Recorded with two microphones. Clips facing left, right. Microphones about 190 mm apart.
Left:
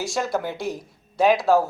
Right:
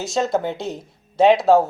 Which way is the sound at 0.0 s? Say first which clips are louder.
Right 4 dB; 20° right (ahead or behind).